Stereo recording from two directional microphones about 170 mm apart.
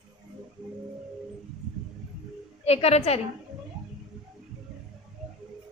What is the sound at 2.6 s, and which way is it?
Speech, 35° left (ahead or behind).